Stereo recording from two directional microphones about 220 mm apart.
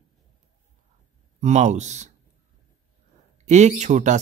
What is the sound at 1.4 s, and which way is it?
Speech, 30° right (ahead or behind).